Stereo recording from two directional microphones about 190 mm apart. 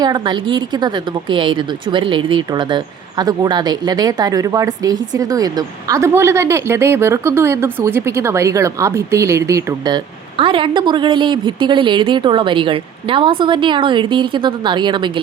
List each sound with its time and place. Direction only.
0.0 s a woman's voice: 25° right (ahead or behind)